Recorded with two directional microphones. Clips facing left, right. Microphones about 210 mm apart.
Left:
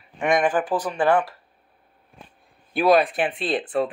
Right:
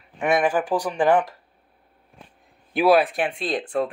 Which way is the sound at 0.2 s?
5° right (ahead or behind).